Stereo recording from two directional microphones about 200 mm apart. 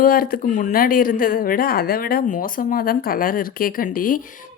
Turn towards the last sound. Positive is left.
turn(degrees=40)  # may be behind; listen again after turning